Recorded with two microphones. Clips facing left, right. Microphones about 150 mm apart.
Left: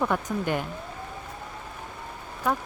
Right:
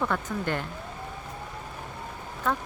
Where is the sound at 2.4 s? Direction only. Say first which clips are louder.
Left 2 dB; 10° left (ahead or behind).